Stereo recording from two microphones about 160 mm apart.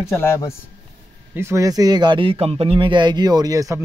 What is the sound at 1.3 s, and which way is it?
Speech, 15° right (ahead or behind).